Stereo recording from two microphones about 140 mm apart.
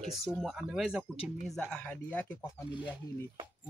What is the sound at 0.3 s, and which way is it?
Speech, 5° right (ahead or behind).